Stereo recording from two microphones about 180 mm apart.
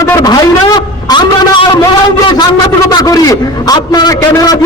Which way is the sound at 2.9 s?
20° left (ahead or behind).